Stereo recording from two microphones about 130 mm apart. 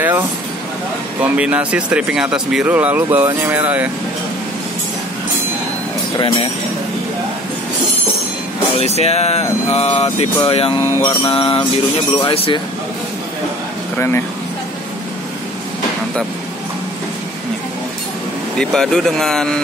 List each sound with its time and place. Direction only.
1.2 s speech: 10° right (ahead or behind)
6.1 s speech: 40° left (ahead or behind)
8.7 s speech: 55° left (ahead or behind)
13.9 s speech: 15° left (ahead or behind)
18.6 s speech: 5° left (ahead or behind)